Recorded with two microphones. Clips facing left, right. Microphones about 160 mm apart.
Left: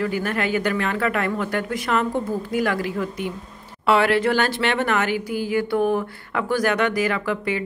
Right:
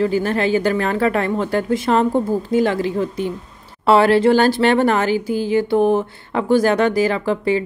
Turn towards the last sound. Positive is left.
turn(degrees=-30)  # may be behind; listen again after turning